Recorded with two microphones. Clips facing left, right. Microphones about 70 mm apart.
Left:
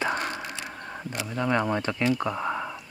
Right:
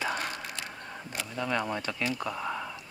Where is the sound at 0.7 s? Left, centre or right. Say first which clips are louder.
Left 5 dB; centre.